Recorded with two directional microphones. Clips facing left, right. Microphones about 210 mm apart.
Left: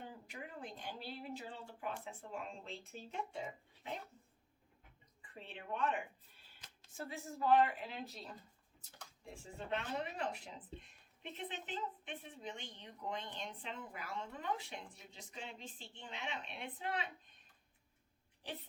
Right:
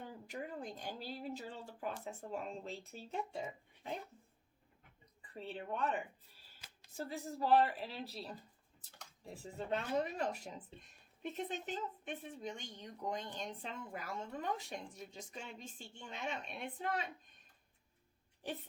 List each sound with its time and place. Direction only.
0.3 s speech: 40° right (ahead or behind)
5.3 s speech: 35° right (ahead or behind)